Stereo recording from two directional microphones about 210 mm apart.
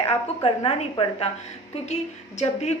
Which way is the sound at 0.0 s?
30° left (ahead or behind).